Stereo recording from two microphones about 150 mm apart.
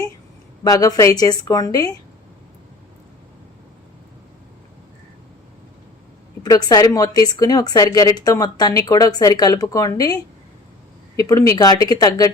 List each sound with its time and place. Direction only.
0.6 s a woman's voice: 25° left (ahead or behind)
6.4 s a woman's voice: 25° left (ahead or behind)
11.2 s a woman's voice: 20° left (ahead or behind)